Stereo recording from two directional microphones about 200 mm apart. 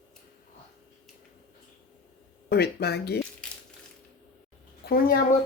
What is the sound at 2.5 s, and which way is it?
Speech, 55° left (ahead or behind).